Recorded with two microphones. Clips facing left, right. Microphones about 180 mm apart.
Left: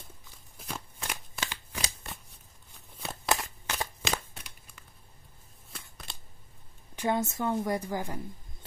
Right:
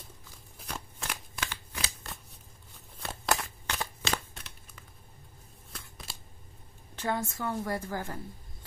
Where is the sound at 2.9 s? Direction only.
Centre (ahead or behind).